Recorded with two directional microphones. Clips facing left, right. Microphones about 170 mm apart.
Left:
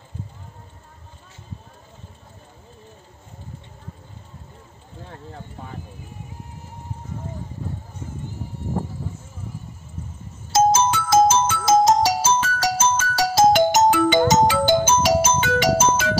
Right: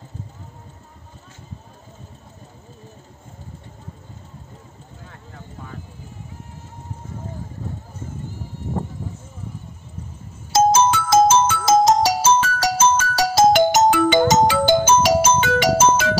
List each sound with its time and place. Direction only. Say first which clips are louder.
10.5 s music: right 2 dB; 90° right